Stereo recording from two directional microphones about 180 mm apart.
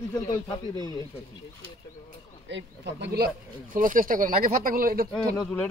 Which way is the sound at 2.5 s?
75° right (ahead or behind).